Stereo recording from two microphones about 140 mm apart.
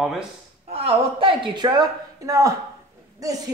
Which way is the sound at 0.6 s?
45° right (ahead or behind).